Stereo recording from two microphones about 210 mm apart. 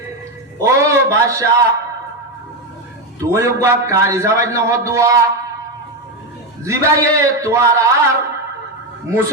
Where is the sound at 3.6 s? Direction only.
15° right (ahead or behind).